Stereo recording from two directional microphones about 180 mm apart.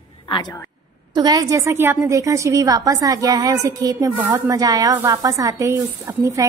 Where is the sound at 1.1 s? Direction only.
20° right (ahead or behind).